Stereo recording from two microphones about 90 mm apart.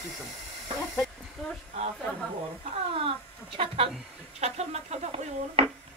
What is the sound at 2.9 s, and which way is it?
Speech, 90° right.